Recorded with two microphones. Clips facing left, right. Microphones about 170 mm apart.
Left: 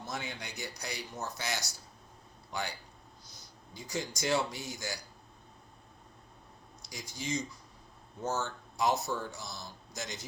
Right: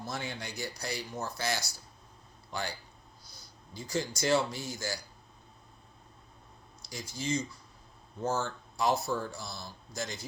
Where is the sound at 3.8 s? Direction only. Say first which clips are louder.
Right 4 dB; 15° left (ahead or behind).